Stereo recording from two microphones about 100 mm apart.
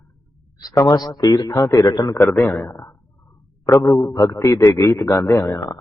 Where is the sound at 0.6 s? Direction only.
35° left (ahead or behind).